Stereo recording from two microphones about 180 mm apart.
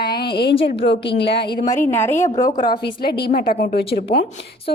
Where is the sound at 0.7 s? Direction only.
30° left (ahead or behind).